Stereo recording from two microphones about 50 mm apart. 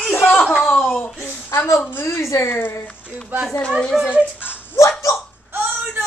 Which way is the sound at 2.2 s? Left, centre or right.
Left.